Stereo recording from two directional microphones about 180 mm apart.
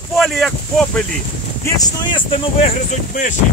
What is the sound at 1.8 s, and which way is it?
Speech, 30° left (ahead or behind).